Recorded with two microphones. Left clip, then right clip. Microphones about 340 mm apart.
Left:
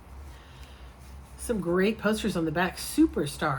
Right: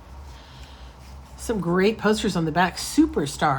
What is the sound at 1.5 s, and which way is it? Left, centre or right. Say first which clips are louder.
Speech: right 4 dB; right.